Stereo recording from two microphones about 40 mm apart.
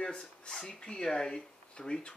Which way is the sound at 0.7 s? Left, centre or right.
Left.